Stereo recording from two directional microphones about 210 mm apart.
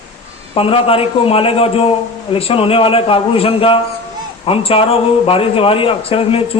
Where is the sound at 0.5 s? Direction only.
25° left (ahead or behind).